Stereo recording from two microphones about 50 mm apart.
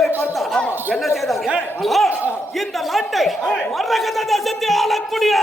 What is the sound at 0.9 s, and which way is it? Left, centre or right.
Speech, centre.